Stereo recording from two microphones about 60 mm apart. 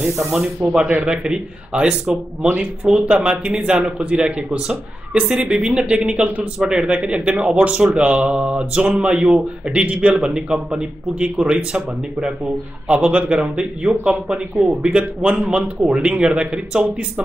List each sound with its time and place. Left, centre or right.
0.7 s speech: centre